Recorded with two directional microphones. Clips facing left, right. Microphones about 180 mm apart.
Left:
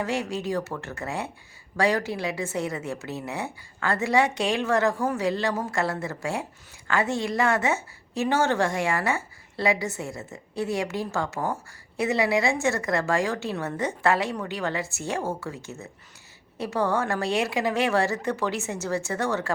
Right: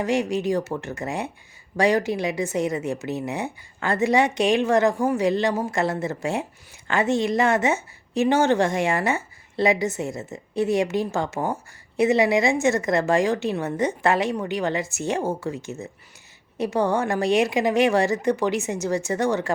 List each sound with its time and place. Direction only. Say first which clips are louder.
0.0 s a woman's voice: right 5 dB; 15° right (ahead or behind)